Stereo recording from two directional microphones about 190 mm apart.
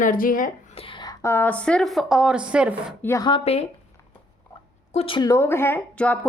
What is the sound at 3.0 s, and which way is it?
Speech, 15° left (ahead or behind).